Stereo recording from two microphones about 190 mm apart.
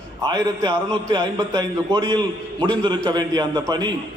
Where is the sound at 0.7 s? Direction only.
20° right (ahead or behind).